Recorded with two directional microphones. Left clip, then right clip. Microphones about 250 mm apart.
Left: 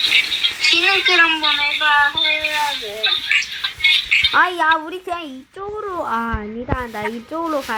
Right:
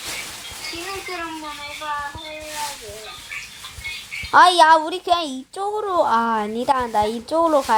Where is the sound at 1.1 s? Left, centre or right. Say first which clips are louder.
Left 15 dB; left.